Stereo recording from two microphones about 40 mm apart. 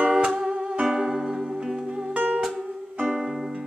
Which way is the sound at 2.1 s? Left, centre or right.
Right.